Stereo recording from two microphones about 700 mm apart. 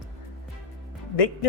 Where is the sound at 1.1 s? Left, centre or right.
Left.